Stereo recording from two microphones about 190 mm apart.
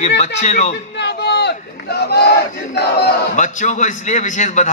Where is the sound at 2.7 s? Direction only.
55° left (ahead or behind).